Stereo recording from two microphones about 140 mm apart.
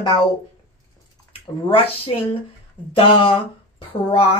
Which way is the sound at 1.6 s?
40° left (ahead or behind).